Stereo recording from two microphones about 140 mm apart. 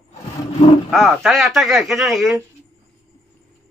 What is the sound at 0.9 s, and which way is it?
Speech, centre (ahead or behind).